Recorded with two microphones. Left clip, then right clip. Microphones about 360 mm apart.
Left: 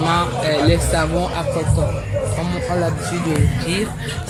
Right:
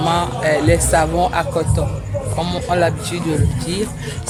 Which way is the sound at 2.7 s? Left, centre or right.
Right.